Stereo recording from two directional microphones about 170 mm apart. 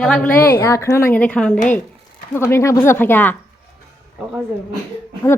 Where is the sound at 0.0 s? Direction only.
10° left (ahead or behind).